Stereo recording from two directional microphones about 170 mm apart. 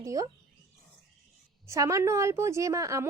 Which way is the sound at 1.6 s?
20° right (ahead or behind).